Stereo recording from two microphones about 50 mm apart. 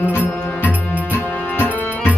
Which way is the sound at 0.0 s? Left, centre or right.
Left.